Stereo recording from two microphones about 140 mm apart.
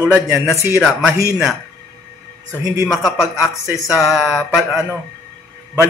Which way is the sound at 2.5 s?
20° right (ahead or behind).